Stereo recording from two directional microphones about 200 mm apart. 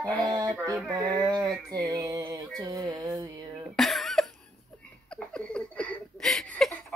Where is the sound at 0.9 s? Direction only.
20° right (ahead or behind).